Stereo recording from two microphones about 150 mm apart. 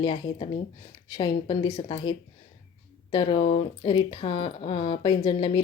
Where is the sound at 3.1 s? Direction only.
35° left (ahead or behind).